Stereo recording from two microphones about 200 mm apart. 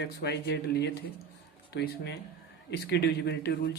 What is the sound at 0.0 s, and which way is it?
Speech, 55° left (ahead or behind).